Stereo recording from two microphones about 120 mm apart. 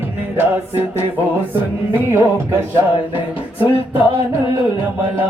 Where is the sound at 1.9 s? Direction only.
20° right (ahead or behind).